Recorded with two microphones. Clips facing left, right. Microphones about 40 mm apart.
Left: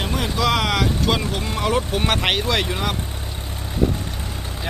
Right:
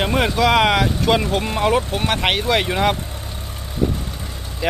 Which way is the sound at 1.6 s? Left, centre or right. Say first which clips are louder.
Right 3 dB; centre.